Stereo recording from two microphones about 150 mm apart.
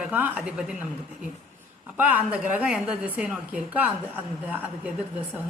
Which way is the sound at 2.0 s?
10° right (ahead or behind).